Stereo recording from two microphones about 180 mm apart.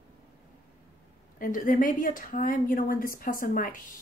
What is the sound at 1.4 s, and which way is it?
A woman's voice, 50° left (ahead or behind).